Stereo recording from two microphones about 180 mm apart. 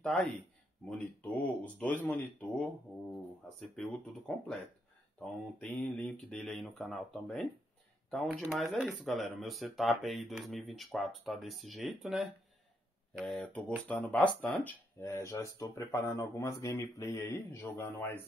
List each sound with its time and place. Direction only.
0.0 s speech: 5° left (ahead or behind)
5.2 s speech: 5° left (ahead or behind)